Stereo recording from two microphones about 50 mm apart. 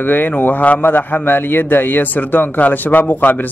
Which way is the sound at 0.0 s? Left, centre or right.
Left.